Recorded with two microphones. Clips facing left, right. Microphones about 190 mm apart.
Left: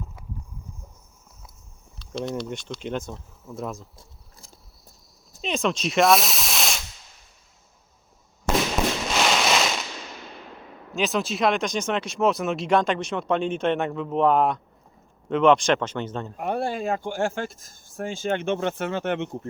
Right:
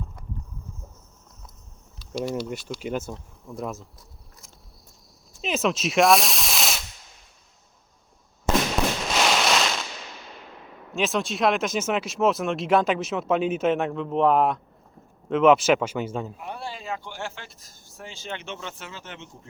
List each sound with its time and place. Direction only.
0.2 s a sound: 5° left (ahead or behind)
2.0 s speech: 10° right (ahead or behind)
3.9 s a sound: 30° left (ahead or behind)
5.4 s spray: centre (ahead or behind)
9.1 s fireworks: centre (ahead or behind)
10.9 s speech: centre (ahead or behind)
16.4 s speech: 50° left (ahead or behind)